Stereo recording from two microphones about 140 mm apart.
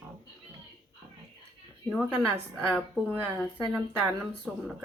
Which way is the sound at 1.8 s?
5° left (ahead or behind).